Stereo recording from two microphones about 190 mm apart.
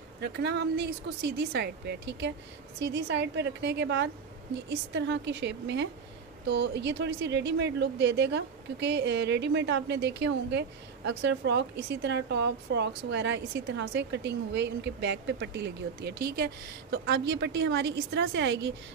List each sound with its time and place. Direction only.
0.2 s a woman's voice: 65° right (ahead or behind)